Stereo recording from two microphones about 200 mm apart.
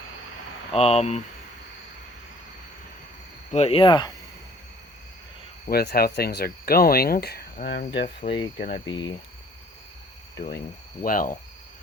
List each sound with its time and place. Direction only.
0.7 s speech: 30° left (ahead or behind)
3.5 s speech: 30° left (ahead or behind)
5.6 s speech: 50° left (ahead or behind)
8.5 s speech: 50° left (ahead or behind)
8.9 s speech: 20° left (ahead or behind)
11.0 s speech: 45° left (ahead or behind)